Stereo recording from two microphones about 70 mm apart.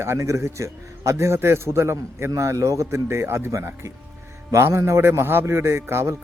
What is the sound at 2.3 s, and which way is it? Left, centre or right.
A man's voice, right.